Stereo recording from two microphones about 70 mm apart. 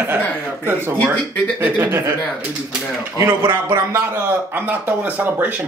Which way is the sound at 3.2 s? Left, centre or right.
Right.